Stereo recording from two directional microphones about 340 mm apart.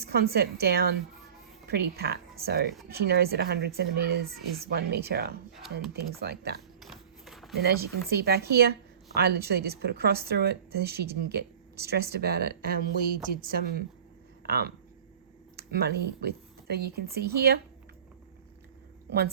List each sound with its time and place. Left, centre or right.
0.0 s a woman's voice: right
6.7 s a sound: centre
7.5 s a woman's voice: right